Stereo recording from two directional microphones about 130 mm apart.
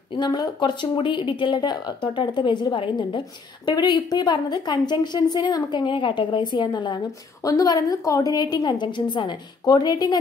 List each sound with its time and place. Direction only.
0.1 s a woman's voice: 35° left (ahead or behind)